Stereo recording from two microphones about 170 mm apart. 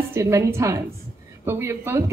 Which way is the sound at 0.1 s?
20° right (ahead or behind).